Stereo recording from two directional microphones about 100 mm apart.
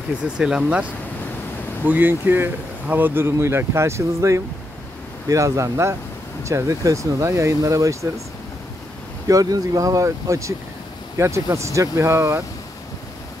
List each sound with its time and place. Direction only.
0.4 s speech: 5° right (ahead or behind)
1.9 s speech: 20° right (ahead or behind)
9.3 s speech: 35° right (ahead or behind)